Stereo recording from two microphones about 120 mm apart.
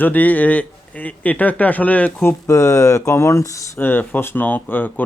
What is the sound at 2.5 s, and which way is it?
Speech, 25° left (ahead or behind).